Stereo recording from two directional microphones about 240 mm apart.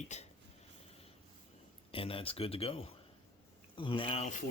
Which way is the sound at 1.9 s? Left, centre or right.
Left.